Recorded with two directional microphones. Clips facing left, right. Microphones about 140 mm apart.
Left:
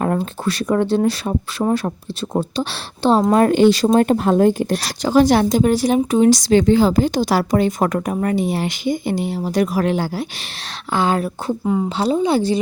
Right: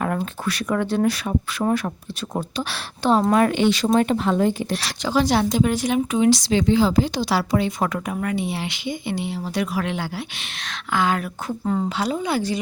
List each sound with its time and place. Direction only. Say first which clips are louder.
0.4 s speech: left 5 dB; 30° left (ahead or behind)
11.6 s a woman's voice: left 3 dB; 10° left (ahead or behind)
11.9 s speech: left 6 dB; 30° left (ahead or behind)